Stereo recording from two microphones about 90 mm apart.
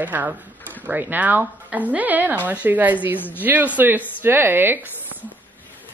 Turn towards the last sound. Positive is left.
turn(degrees=-25)  # may be behind; listen again after turning